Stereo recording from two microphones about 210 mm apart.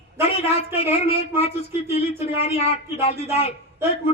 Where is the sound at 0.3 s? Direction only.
30° left (ahead or behind).